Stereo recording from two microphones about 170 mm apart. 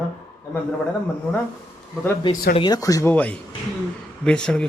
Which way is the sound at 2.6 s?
25° left (ahead or behind).